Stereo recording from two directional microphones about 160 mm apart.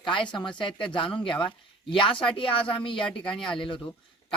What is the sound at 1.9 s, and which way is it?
Speech, 30° left (ahead or behind).